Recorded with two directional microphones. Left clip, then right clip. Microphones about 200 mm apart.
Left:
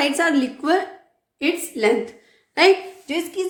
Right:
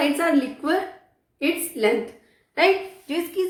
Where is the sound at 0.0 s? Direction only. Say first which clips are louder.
Left 2 dB; 50° left (ahead or behind).